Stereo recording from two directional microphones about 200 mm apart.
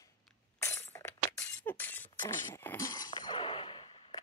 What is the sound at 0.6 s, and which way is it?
Glass, 15° left (ahead or behind).